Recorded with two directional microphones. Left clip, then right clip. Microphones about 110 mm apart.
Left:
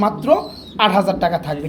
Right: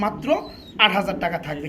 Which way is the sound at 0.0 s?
25° left (ahead or behind).